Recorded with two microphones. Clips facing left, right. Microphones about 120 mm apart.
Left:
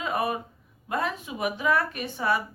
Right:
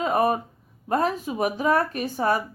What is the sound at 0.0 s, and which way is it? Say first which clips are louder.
A woman's voice: right 6 dB; 40° right (ahead or behind).